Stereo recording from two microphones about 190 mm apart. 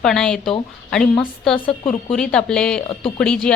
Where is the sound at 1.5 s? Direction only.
30° left (ahead or behind).